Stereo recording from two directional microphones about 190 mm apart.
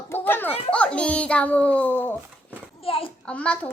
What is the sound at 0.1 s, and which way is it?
Children playing, 10° left (ahead or behind).